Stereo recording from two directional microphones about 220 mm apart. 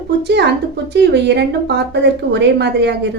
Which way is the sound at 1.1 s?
50° right (ahead or behind).